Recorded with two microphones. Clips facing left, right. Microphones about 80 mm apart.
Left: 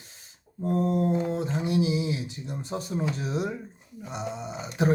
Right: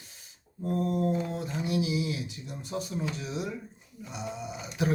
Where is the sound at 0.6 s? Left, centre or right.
Left.